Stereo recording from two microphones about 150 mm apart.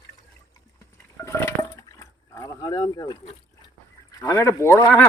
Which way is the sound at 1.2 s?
20° left (ahead or behind).